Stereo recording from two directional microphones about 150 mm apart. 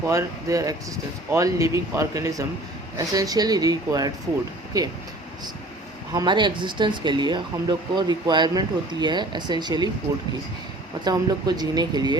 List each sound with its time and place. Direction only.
0.0 s speech: 20° right (ahead or behind)
6.1 s speech: 30° right (ahead or behind)
11.0 s speech: 25° right (ahead or behind)